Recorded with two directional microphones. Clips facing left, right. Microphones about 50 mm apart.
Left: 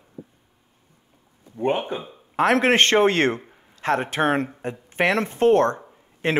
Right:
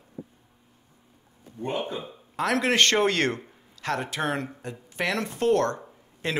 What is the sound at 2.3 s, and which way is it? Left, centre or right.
Speech, left.